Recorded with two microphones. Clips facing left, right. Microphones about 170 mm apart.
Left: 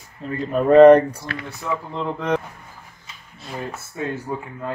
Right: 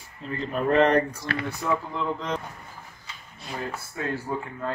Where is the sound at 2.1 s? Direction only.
60° left (ahead or behind).